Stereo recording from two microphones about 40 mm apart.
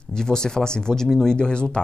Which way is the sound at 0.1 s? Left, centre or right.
Centre.